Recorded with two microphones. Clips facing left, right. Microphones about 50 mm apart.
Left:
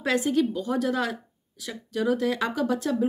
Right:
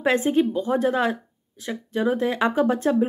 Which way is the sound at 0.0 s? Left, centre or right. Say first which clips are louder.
Right 4 dB; right.